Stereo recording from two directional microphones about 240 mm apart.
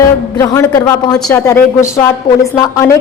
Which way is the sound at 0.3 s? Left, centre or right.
Centre.